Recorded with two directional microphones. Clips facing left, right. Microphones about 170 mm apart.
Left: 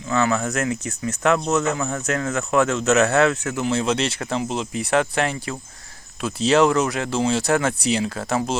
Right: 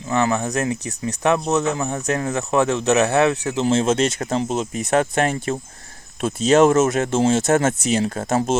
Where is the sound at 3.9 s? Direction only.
45° right (ahead or behind).